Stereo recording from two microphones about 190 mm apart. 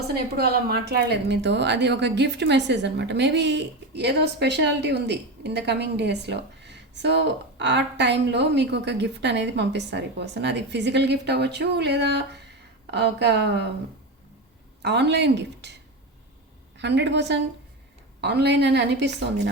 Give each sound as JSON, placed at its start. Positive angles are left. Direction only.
{"t": 0.1, "sound": "a woman's voice", "side_deg": -55}
{"t": 14.8, "sound": "a woman's voice", "side_deg": -60}
{"t": 16.7, "sound": "a woman's voice", "side_deg": -65}